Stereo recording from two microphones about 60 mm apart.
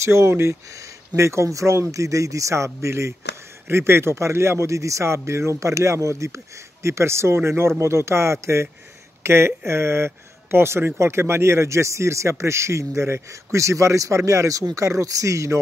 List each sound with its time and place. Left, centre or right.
0.0 s a man's voice: right